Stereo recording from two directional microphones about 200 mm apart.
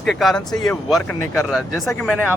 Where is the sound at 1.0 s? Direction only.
90° left.